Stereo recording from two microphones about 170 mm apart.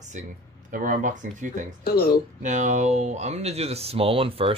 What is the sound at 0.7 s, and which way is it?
Speech, 55° right (ahead or behind).